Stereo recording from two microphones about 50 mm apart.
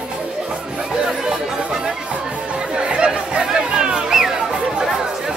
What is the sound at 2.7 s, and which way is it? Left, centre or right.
Chatter, centre.